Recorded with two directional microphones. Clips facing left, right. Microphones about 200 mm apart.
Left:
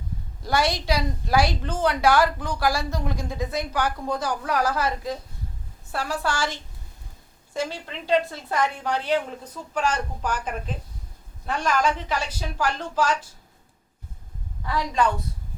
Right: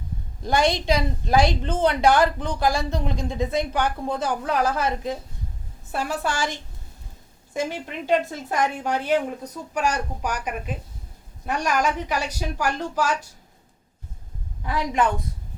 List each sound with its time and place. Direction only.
0.4 s a woman's voice: 20° right (ahead or behind)
14.6 s a woman's voice: 20° right (ahead or behind)